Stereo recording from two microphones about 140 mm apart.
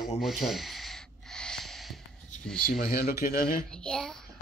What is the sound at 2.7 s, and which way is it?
Speech, 90° left.